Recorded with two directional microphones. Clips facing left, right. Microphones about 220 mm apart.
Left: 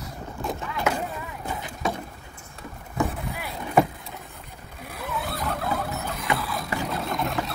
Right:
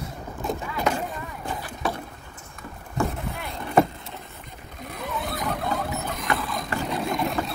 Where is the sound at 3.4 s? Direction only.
5° left (ahead or behind).